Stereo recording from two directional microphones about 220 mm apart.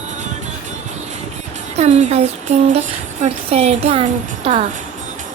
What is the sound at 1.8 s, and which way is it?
Music, 30° right (ahead or behind).